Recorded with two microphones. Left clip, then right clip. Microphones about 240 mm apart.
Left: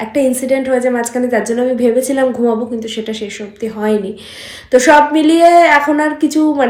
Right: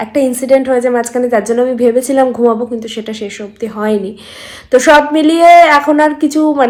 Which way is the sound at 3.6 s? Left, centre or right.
Right.